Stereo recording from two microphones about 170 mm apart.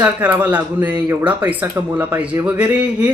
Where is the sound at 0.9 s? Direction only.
20° right (ahead or behind).